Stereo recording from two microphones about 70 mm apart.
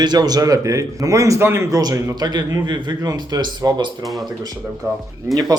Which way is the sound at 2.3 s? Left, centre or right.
Right.